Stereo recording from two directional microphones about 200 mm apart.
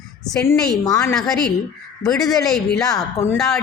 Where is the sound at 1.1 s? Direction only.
Centre (ahead or behind).